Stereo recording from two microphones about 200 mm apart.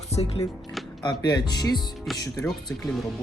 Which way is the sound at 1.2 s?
20° left (ahead or behind).